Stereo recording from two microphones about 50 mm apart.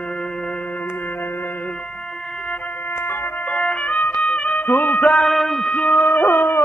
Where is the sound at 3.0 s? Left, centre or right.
Left.